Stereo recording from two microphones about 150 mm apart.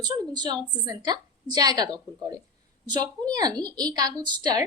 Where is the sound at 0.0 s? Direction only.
30° right (ahead or behind).